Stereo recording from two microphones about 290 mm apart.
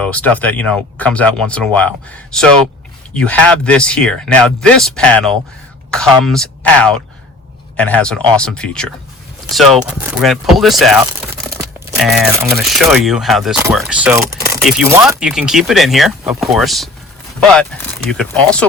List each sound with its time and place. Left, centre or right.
0.0 s speech: centre